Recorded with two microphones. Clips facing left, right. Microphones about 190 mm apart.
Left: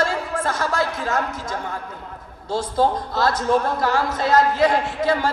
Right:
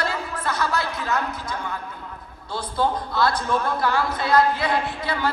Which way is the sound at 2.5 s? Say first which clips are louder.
Left 4 dB; 40° left (ahead or behind).